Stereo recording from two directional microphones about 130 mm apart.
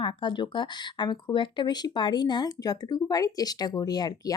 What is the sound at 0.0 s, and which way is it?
Speech, 35° left (ahead or behind).